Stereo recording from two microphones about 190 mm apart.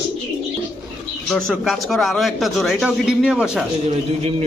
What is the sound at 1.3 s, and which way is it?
Speech, centre (ahead or behind).